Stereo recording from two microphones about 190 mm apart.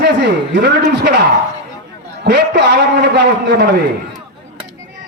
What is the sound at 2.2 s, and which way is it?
A man's voice, 65° right (ahead or behind).